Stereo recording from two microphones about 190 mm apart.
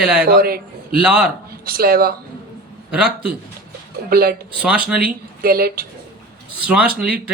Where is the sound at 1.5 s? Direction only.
50° right (ahead or behind).